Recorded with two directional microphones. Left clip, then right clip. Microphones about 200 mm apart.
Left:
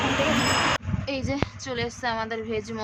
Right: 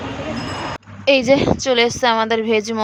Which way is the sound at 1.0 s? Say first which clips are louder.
Right 16 dB; 45° right (ahead or behind).